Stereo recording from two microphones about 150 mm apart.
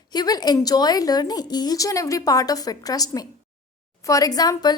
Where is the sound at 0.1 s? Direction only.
25° left (ahead or behind).